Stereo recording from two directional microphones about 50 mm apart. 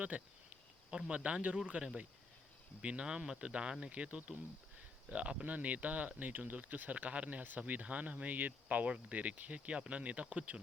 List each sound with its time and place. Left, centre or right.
0.1 s speech: right
0.9 s speech: centre
1.2 s speech: right
2.8 s speech: right